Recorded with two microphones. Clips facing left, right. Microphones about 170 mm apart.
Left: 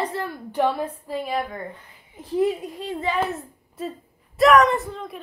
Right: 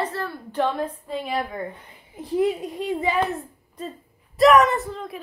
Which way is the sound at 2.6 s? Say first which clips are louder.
Right 3 dB; 15° right (ahead or behind).